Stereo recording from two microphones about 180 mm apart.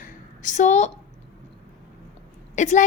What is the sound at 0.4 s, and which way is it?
Speech, 40° left (ahead or behind).